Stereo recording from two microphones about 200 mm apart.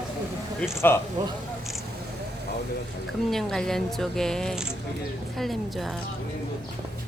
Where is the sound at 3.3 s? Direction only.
Centre (ahead or behind).